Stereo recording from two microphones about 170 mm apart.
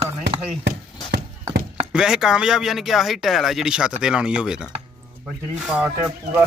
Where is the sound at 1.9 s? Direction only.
5° right (ahead or behind).